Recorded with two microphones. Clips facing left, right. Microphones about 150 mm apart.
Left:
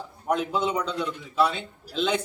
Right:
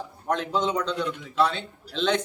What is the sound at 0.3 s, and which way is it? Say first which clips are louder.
A man's voice: even; 10° left (ahead or behind).